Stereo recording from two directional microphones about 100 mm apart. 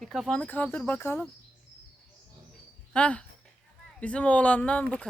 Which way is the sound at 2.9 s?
10° left (ahead or behind).